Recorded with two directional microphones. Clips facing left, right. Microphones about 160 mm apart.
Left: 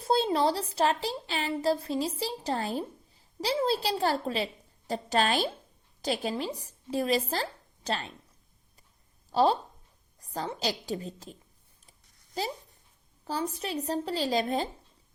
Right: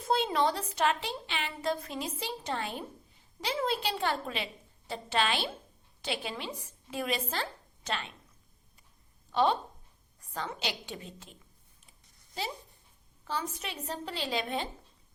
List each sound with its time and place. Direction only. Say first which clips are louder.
0.0 s a woman's voice: left 3 dB; 35° left (ahead or behind)
9.3 s a woman's voice: left 3 dB; 35° left (ahead or behind)
12.4 s a woman's voice: left 4 dB; 40° left (ahead or behind)